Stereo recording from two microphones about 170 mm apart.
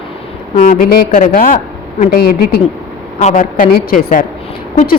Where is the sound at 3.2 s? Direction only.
50° left (ahead or behind).